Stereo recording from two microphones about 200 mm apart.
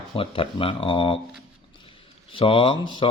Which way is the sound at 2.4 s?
25° left (ahead or behind).